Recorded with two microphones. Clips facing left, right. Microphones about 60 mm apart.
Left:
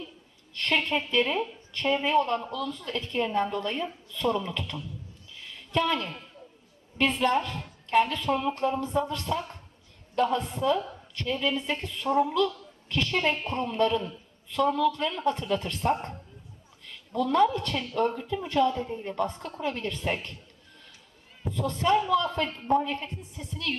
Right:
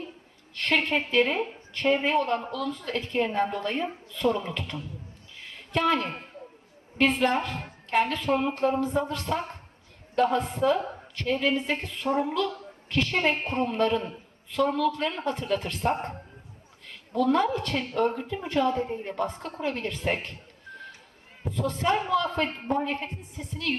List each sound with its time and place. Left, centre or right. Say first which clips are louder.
0.6 s a woman's voice: right 2 dB; right
5.4 s a sound: right 1 dB; right
7.0 s a woman's voice: right 1 dB; right
17.2 s a woman's voice: even; right